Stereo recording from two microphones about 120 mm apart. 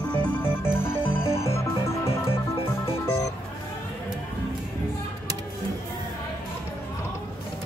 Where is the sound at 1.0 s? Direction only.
55° left (ahead or behind).